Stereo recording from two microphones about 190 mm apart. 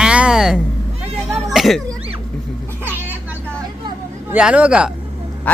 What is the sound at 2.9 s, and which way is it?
Vehicle, 10° right (ahead or behind).